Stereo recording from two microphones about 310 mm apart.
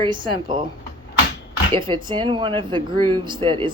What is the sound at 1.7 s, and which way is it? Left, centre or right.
Speech, centre.